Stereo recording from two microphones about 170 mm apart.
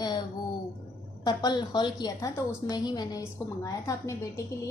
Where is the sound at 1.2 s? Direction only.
25° left (ahead or behind).